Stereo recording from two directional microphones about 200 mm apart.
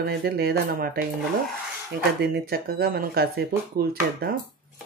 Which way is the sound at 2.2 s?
50° right (ahead or behind).